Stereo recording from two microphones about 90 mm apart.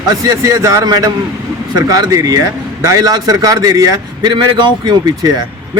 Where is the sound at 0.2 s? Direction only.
35° right (ahead or behind).